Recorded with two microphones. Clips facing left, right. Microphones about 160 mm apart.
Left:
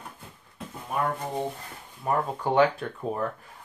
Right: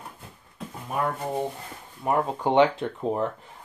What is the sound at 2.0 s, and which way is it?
Speech, 20° right (ahead or behind).